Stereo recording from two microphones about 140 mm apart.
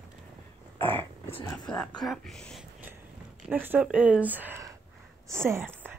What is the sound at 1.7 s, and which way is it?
Speech, 5° left (ahead or behind).